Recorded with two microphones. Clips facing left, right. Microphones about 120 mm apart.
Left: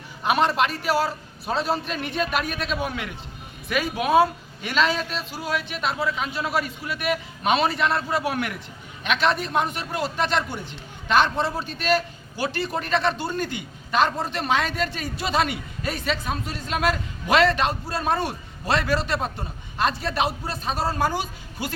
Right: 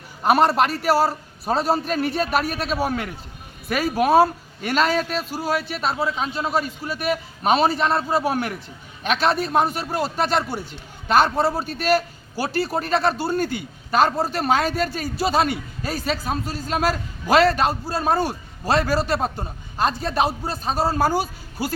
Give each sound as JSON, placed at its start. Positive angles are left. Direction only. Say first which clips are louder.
{"t": 0.2, "sound": "a man's voice", "louder": "right 4 dB", "side_deg": -40}